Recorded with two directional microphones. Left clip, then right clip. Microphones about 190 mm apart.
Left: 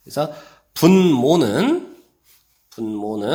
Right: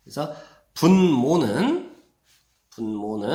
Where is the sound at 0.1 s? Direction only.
35° left (ahead or behind).